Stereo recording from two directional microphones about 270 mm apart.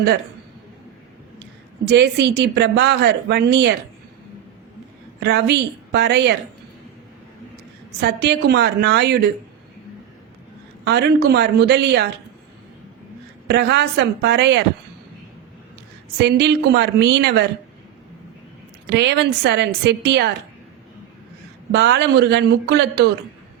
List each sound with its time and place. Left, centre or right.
1.9 s speech: right
5.2 s speech: right
8.0 s speech: right
10.8 s speech: right
13.5 s speech: right
16.2 s speech: right
18.9 s speech: right
21.7 s speech: right